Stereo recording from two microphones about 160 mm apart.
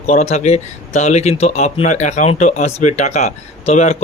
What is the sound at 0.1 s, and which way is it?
Speech, 45° left (ahead or behind).